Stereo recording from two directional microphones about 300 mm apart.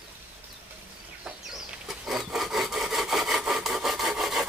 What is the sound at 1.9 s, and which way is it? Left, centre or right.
Wood, centre.